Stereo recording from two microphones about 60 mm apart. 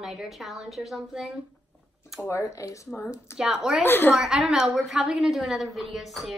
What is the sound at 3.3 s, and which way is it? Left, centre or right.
Speech, centre.